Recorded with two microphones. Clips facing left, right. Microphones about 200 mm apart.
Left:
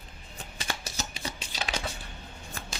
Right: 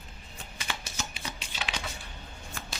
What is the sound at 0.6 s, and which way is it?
Typewriter, 40° left (ahead or behind).